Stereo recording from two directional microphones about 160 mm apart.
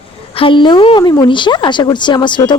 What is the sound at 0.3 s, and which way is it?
A woman's voice, 30° left (ahead or behind).